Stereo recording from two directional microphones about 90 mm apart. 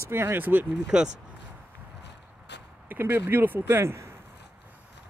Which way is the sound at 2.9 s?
20° right (ahead or behind).